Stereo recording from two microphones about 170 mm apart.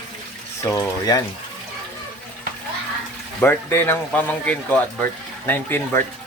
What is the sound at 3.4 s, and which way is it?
Speech, 10° left (ahead or behind).